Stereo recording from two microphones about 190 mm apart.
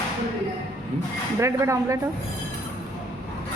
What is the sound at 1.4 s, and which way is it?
Speech, 15° right (ahead or behind).